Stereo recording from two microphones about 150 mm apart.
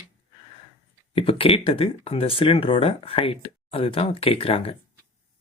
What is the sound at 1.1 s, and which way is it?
Speech, 40° left (ahead or behind).